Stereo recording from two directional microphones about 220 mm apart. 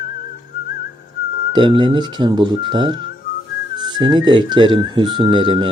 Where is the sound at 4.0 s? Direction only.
20° right (ahead or behind).